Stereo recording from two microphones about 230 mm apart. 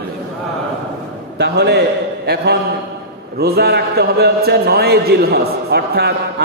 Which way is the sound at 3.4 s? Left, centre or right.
Right.